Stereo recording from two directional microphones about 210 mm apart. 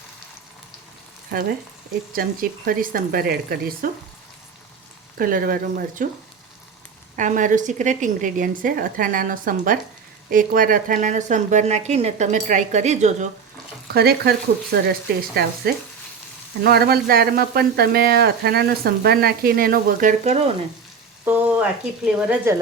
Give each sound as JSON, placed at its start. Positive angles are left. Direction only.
{"t": 1.3, "sound": "speech", "side_deg": -45}
{"t": 5.1, "sound": "a woman's voice", "side_deg": -40}
{"t": 7.2, "sound": "a woman's voice", "side_deg": -35}
{"t": 13.8, "sound": "speech", "side_deg": -50}
{"t": 16.6, "sound": "speech", "side_deg": -45}
{"t": 21.2, "sound": "speech", "side_deg": -10}